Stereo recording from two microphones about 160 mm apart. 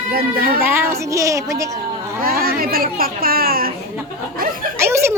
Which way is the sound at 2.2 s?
70° right (ahead or behind).